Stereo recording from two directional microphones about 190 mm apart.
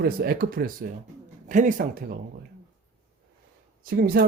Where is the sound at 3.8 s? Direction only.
55° right (ahead or behind).